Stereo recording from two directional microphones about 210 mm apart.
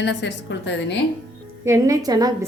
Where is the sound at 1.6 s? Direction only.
15° right (ahead or behind).